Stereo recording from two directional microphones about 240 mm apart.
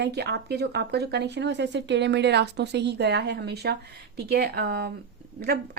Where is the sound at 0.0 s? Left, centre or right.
Right.